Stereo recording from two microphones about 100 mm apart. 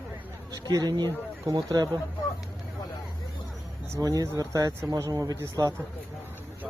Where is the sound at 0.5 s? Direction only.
35° right (ahead or behind).